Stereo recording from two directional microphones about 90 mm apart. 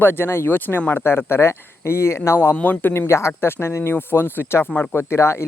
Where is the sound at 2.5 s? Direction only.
20° left (ahead or behind).